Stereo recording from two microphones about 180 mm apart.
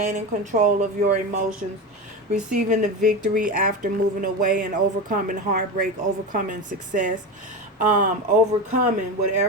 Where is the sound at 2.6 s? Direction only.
45° right (ahead or behind).